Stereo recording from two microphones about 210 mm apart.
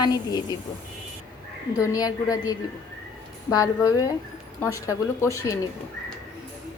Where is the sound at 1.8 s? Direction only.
15° left (ahead or behind).